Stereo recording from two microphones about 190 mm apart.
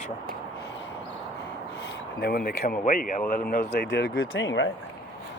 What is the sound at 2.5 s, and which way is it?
Speech, 50° left (ahead or behind).